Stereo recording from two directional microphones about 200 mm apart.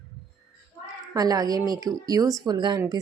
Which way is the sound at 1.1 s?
20° right (ahead or behind).